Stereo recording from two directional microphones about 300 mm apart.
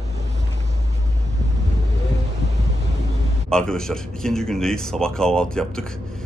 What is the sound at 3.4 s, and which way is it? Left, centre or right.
Speech, centre.